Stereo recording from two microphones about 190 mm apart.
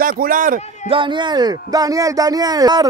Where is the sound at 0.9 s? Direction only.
25° right (ahead or behind).